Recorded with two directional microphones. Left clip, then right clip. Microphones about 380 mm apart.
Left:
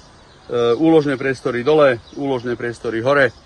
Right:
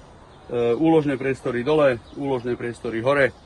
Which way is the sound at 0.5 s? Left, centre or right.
Left.